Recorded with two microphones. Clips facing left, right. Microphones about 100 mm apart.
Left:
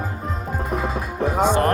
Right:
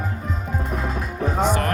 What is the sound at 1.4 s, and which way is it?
Music, 20° left (ahead or behind).